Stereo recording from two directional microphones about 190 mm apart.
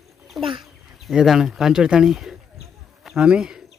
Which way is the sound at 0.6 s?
Centre (ahead or behind).